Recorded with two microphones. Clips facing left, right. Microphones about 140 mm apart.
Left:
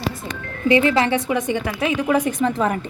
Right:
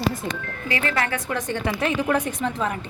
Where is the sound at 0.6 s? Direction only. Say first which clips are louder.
Left 9 dB; 25° left (ahead or behind); by 2.2 s 5° left (ahead or behind).